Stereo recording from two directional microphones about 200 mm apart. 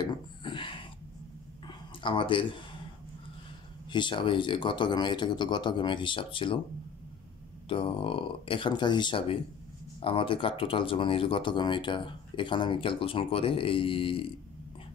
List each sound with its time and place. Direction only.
0.0 s a sound: 25° left (ahead or behind)
3.9 s speech: 25° left (ahead or behind)
7.6 s speech: 25° left (ahead or behind)